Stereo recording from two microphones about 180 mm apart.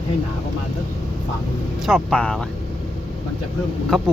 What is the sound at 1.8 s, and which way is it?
Speech, 5° left (ahead or behind).